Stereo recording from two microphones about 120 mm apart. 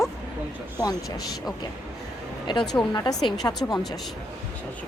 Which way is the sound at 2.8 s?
35° left (ahead or behind).